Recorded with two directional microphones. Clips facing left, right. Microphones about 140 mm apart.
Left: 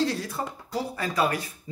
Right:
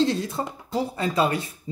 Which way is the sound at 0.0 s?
25° right (ahead or behind).